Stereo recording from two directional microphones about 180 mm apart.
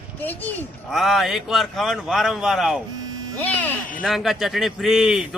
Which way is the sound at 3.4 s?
10° left (ahead or behind).